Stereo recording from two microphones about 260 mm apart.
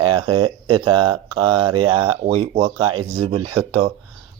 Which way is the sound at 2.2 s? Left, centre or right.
Right.